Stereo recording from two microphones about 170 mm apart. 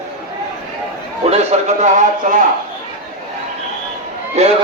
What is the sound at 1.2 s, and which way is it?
A man's voice, 40° right (ahead or behind).